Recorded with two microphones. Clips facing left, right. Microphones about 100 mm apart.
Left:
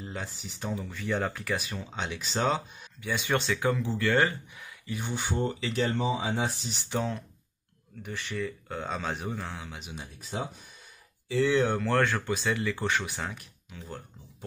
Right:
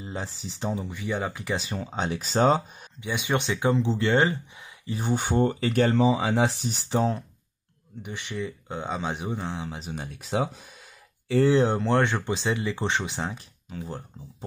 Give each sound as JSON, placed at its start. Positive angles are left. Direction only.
{"t": 0.1, "sound": "speech", "side_deg": -30}
{"t": 0.8, "sound": "speech", "side_deg": -15}
{"t": 1.8, "sound": "speech", "side_deg": -35}
{"t": 3.0, "sound": "speech", "side_deg": -20}
{"t": 4.9, "sound": "speech", "side_deg": -45}
{"t": 5.9, "sound": "speech", "side_deg": -90}
{"t": 6.6, "sound": "speech", "side_deg": -40}
{"t": 8.0, "sound": "speech", "side_deg": -20}
{"t": 9.9, "sound": "speech", "side_deg": -55}
{"t": 10.2, "sound": "a sound", "side_deg": -85}
{"t": 11.3, "sound": "speech", "side_deg": -35}